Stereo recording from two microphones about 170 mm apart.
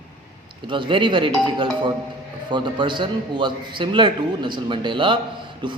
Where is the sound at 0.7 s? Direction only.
30° right (ahead or behind).